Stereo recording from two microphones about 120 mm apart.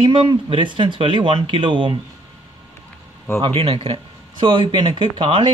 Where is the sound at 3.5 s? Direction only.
55° right (ahead or behind).